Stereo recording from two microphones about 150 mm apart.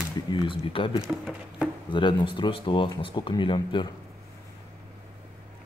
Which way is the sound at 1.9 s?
30° left (ahead or behind).